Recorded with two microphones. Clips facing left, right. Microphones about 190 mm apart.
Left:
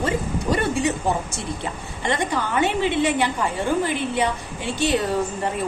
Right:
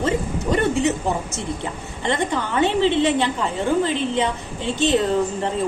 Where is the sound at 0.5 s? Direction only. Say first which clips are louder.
Right 3 dB; 20° right (ahead or behind).